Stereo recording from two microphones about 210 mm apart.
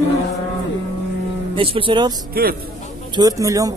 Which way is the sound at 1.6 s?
25° right (ahead or behind).